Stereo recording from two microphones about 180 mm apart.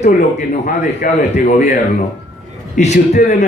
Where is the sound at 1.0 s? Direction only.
45° left (ahead or behind).